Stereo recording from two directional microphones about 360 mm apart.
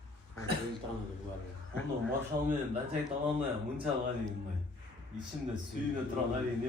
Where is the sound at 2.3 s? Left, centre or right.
Right.